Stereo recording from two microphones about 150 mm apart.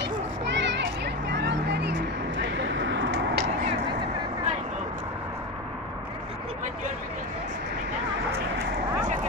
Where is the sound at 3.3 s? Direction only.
75° right (ahead or behind).